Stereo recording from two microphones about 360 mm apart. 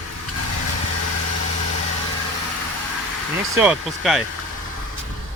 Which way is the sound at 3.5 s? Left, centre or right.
Centre.